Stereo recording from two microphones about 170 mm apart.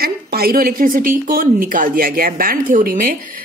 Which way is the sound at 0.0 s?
65° right (ahead or behind).